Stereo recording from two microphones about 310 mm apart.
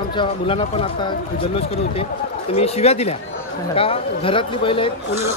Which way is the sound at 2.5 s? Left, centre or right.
Centre.